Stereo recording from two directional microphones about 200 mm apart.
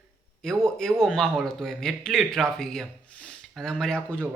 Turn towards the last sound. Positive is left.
turn(degrees=5)  # may be behind; listen again after turning